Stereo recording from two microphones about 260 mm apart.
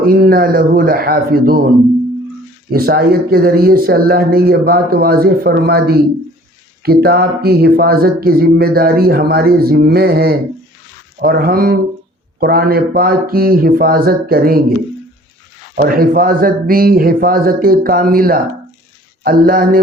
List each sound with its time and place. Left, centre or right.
0.0 s speech: right
2.7 s speech: right
15.8 s speech: right